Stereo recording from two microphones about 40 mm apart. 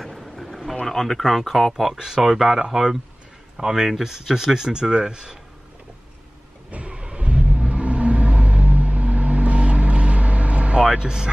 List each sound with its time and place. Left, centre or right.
0.0 s a sound: centre
0.8 s speech: centre
1.7 s speech: centre
6.7 s vehicle: right
10.9 s speech: centre